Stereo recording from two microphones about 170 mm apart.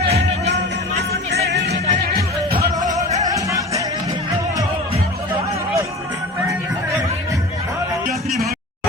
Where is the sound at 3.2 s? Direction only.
20° right (ahead or behind).